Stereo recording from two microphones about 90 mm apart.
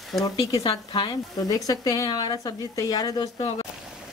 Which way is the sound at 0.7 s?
65° left (ahead or behind).